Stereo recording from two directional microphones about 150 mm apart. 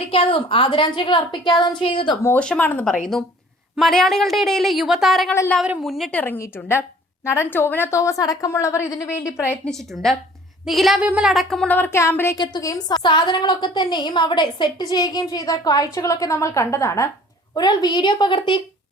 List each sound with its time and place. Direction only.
0.1 s a woman's voice: 40° left (ahead or behind)
2.2 s a woman's voice: 10° left (ahead or behind)
5.3 s a woman's voice: 15° left (ahead or behind)
5.5 s a woman's voice: 5° right (ahead or behind)
6.1 s a woman's voice: 15° left (ahead or behind)
9.6 s a woman's voice: 5° left (ahead or behind); by 18.6 s 30° left (ahead or behind)